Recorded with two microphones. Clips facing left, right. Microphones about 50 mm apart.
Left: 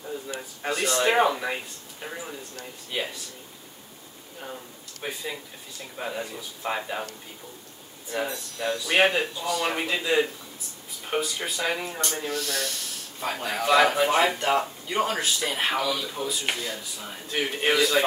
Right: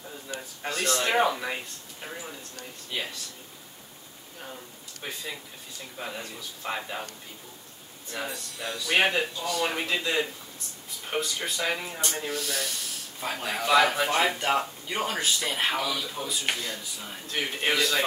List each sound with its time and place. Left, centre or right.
0.3 s speech: centre
5.0 s speech: centre
8.1 s speech: centre